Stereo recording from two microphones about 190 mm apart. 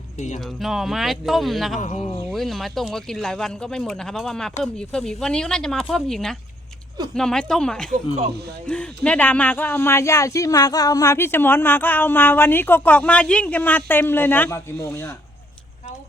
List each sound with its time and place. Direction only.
0.3 s speech: centre (ahead or behind)
1.8 s speech: 35° left (ahead or behind)
2.3 s speech: centre (ahead or behind)